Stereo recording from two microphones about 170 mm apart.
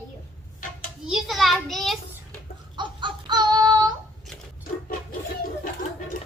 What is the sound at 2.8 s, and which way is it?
Child singing, 25° right (ahead or behind).